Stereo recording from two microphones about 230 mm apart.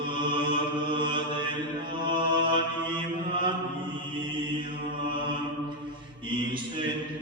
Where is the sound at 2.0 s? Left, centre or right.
Right.